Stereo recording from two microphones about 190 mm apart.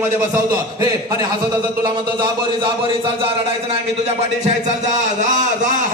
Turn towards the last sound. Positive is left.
turn(degrees=-40)  # may be behind; listen again after turning